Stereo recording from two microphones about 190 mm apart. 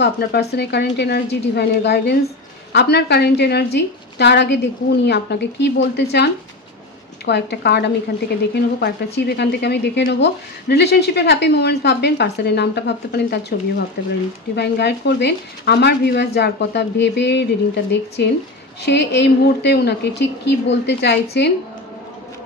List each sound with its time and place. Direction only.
0.0 s speech: 60° left (ahead or behind)